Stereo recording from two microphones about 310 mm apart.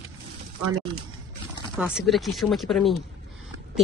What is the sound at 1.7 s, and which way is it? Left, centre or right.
Speech, centre.